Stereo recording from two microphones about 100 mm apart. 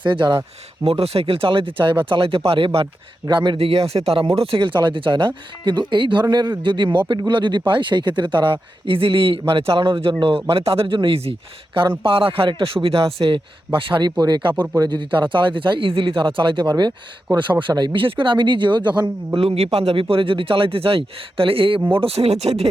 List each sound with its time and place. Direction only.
0.1 s speech: 40° right (ahead or behind)
0.9 s a man's voice: 85° right; by 2.8 s 65° right (ahead or behind)
3.2 s speech: 50° right (ahead or behind)
3.6 s a man's voice: 75° right (ahead or behind)
4.4 s speech: 55° right (ahead or behind)
8.9 s a man's voice: 60° right (ahead or behind)
11.8 s speech: 60° right (ahead or behind)
13.2 s speech: 50° right (ahead or behind)
19.4 s a man's voice: 75° right (ahead or behind)
21.8 s speech: 20° right (ahead or behind)
22.0 s speech: 90° right